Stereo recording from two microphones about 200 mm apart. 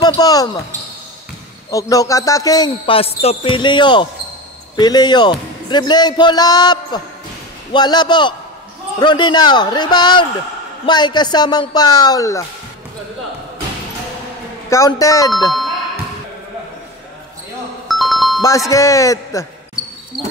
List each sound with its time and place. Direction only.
0.0 s basketball bounce: 20° left (ahead or behind)
1.7 s speech: 15° left (ahead or behind)
14.7 s speech: 15° left (ahead or behind)
17.8 s music: centre (ahead or behind)
18.4 s speech: 15° left (ahead or behind)